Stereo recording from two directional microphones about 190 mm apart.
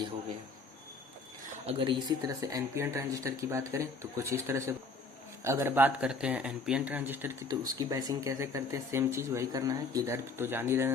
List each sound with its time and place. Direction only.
1.6 s speech: 25° right (ahead or behind)